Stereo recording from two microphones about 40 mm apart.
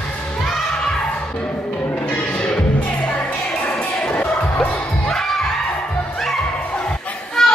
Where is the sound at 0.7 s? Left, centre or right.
Left.